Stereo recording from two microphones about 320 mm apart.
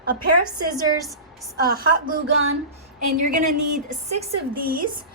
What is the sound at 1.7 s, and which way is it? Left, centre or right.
Speech, right.